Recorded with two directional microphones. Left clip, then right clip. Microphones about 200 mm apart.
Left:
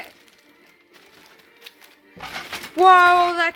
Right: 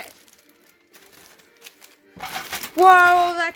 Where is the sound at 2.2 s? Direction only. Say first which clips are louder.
Right 2 dB; 30° right (ahead or behind).